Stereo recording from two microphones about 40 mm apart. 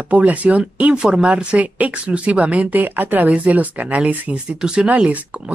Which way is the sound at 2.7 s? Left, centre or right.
Right.